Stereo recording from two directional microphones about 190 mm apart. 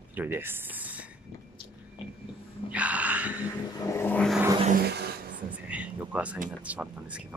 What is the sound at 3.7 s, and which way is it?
Vehicle, 15° left (ahead or behind).